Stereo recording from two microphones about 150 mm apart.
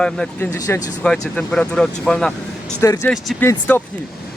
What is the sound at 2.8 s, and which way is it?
Speech, 20° left (ahead or behind).